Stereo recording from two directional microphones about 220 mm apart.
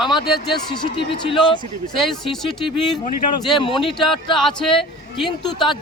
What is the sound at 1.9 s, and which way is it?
Speech, centre (ahead or behind).